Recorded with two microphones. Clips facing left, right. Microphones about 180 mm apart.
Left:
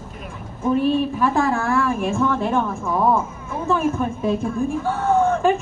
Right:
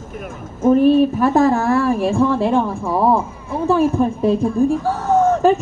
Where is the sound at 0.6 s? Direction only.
45° right (ahead or behind).